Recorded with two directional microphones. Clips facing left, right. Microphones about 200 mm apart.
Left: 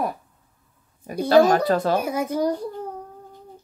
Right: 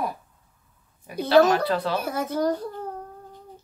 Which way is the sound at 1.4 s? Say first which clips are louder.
Left 3 dB; 45° left (ahead or behind).